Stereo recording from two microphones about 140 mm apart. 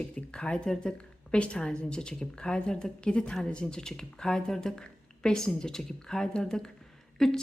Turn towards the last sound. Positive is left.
turn(degrees=5)  # may be behind; listen again after turning